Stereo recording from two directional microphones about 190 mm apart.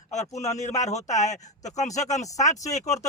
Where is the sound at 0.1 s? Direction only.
35° left (ahead or behind).